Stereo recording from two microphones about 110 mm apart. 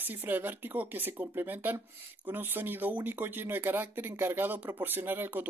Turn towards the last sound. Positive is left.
turn(degrees=-20)  # may be behind; listen again after turning